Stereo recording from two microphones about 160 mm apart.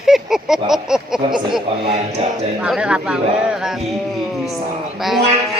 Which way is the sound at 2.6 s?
5° right (ahead or behind).